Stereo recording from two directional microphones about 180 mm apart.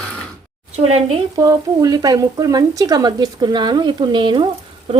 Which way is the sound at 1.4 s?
20° right (ahead or behind).